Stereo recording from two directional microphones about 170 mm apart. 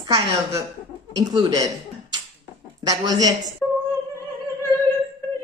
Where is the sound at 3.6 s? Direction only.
15° left (ahead or behind).